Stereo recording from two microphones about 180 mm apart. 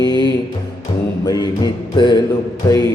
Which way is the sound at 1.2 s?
20° left (ahead or behind).